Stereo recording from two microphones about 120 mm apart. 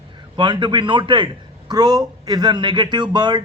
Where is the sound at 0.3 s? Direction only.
40° right (ahead or behind).